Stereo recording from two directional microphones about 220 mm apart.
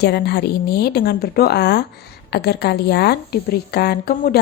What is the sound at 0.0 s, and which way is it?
A woman's voice, 50° left (ahead or behind).